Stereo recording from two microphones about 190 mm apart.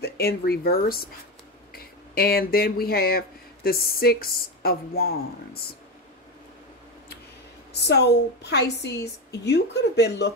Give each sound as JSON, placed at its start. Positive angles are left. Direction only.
{"t": 0.0, "sound": "speech", "side_deg": 55}
{"t": 7.7, "sound": "a woman's voice", "side_deg": 60}